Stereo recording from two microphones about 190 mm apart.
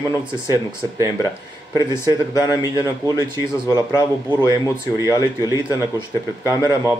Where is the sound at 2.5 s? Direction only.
15° right (ahead or behind).